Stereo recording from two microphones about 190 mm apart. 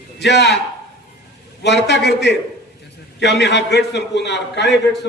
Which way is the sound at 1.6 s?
65° left (ahead or behind).